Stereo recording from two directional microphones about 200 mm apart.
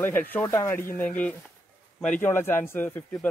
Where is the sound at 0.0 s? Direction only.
10° left (ahead or behind).